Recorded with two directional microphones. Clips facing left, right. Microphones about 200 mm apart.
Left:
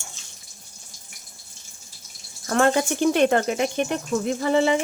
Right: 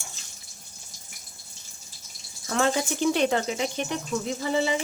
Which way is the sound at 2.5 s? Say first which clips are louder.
Left 5 dB; 55° left (ahead or behind).